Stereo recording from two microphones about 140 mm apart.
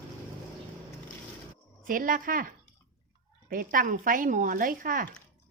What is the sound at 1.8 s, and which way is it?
Speech, 80° right.